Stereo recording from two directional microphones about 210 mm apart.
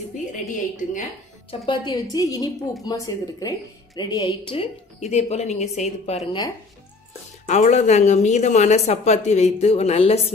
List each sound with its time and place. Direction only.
0.3 s a woman's voice: 35° left (ahead or behind)
1.5 s a woman's voice: 20° left (ahead or behind)
5.1 s speech: 30° left (ahead or behind)
7.4 s speech: 35° left (ahead or behind)